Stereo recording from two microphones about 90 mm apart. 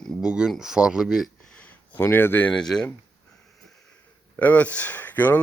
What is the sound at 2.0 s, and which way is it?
Speech, 25° left (ahead or behind).